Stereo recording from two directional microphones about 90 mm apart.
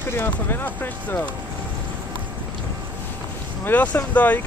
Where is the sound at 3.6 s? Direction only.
15° left (ahead or behind).